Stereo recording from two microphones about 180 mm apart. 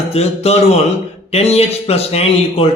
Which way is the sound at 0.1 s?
35° left (ahead or behind).